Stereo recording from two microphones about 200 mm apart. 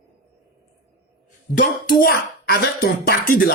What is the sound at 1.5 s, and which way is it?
Speech, 50° left (ahead or behind).